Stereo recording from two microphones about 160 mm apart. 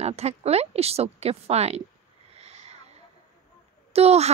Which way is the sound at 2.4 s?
40° right (ahead or behind).